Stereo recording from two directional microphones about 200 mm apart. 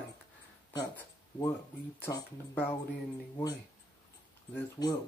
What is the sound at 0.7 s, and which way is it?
Speech, 15° left (ahead or behind).